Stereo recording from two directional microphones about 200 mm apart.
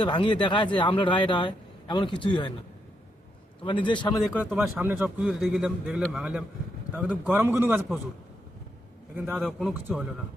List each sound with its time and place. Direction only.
0.0 s speech: 25° left (ahead or behind)
3.6 s speech: 25° left (ahead or behind)
4.4 s a man's voice: 10° right (ahead or behind)
9.1 s a man's voice: 10° right (ahead or behind)
9.5 s a man's voice: centre (ahead or behind)